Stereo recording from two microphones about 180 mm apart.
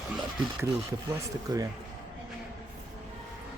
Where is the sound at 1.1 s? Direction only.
20° right (ahead or behind).